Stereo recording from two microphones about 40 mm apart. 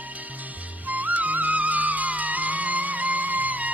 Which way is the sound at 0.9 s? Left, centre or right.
Right.